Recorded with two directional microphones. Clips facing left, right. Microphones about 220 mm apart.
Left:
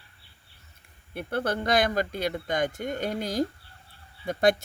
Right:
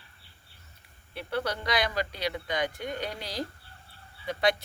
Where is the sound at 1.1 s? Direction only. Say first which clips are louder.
Left 3 dB; 50° left (ahead or behind).